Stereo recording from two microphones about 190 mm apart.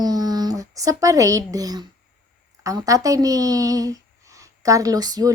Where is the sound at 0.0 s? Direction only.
20° right (ahead or behind).